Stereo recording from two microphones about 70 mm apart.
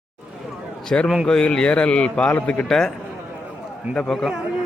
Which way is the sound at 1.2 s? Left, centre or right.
Centre.